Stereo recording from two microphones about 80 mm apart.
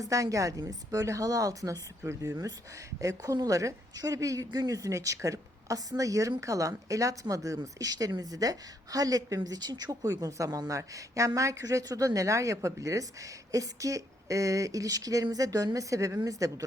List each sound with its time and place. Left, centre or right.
0.0 s speech: right